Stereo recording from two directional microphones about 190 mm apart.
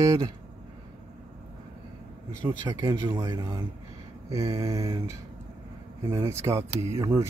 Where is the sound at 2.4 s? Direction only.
20° right (ahead or behind).